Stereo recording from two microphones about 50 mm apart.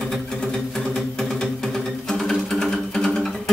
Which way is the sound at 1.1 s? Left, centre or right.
Centre.